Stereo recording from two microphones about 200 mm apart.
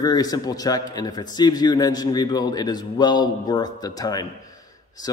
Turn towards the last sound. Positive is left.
turn(degrees=20)  # may be behind; listen again after turning